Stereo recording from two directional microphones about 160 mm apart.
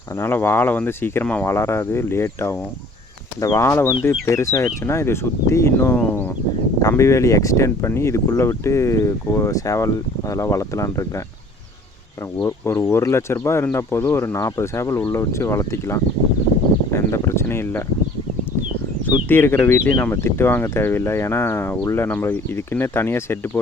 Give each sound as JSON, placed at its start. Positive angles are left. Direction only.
{"t": 0.2, "sound": "speech", "side_deg": 15}
{"t": 12.4, "sound": "speech", "side_deg": 15}
{"t": 16.9, "sound": "a sound", "side_deg": 15}
{"t": 19.0, "sound": "speech", "side_deg": 15}